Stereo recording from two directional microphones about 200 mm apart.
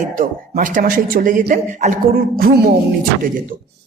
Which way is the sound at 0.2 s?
40° right (ahead or behind).